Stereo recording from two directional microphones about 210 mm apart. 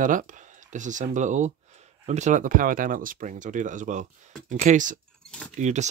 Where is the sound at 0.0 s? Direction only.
40° right (ahead or behind).